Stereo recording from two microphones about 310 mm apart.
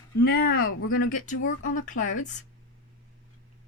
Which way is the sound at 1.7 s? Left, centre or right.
Left.